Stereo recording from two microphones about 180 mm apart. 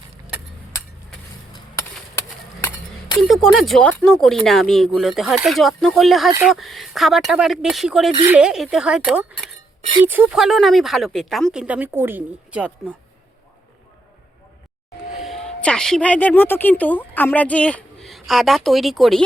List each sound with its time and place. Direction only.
1.5 s a sound: 15° left (ahead or behind)
3.2 s speech: centre (ahead or behind)
15.2 s a woman's voice: centre (ahead or behind)